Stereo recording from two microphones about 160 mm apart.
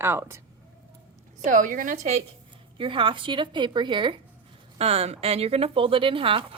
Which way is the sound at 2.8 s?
30° right (ahead or behind).